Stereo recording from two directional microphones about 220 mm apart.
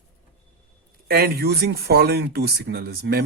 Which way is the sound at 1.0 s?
45° right (ahead or behind).